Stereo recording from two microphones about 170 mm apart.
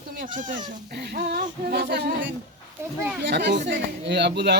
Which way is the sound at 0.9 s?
70° right (ahead or behind).